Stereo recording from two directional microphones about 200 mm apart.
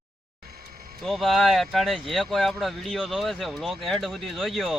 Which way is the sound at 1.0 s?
Centre (ahead or behind).